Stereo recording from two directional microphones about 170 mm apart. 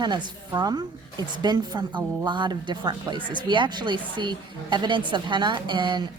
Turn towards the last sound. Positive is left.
turn(degrees=-30)  # may be behind; listen again after turning